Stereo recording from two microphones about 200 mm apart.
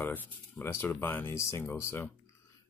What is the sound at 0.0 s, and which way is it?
Speech, 10° left (ahead or behind).